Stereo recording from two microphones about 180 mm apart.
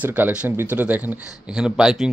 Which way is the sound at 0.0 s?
10° right (ahead or behind).